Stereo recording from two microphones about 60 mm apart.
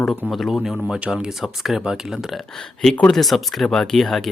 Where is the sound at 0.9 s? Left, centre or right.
Centre.